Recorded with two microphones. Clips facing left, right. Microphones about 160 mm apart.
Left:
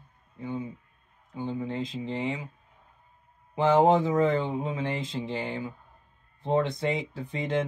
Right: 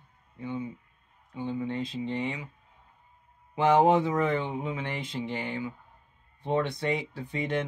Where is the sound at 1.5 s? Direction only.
20° left (ahead or behind).